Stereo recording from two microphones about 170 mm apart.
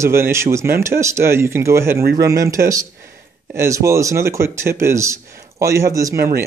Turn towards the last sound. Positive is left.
turn(degrees=-20)  # may be behind; listen again after turning